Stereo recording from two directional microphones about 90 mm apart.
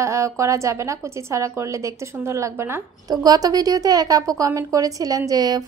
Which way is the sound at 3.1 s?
45° right (ahead or behind).